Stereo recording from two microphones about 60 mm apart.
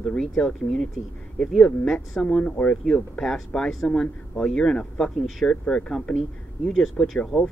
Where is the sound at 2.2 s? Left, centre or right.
Centre.